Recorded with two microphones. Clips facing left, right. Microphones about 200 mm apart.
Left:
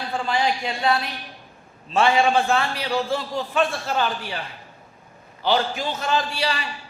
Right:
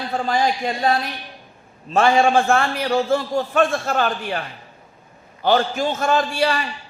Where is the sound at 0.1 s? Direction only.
45° right (ahead or behind).